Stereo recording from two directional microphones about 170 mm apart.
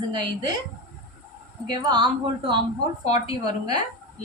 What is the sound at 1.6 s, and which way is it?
Speech, 25° right (ahead or behind).